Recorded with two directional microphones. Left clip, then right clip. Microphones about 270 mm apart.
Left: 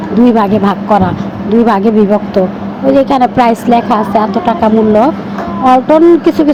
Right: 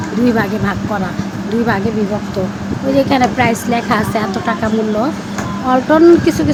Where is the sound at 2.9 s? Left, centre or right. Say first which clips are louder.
Left 4 dB; centre.